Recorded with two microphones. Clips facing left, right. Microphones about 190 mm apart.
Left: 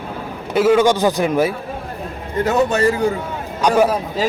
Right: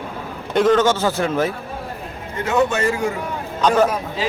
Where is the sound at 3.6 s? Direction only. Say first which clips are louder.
Left 1 dB; 10° left (ahead or behind).